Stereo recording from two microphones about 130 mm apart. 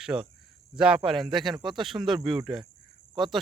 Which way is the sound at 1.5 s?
35° right (ahead or behind).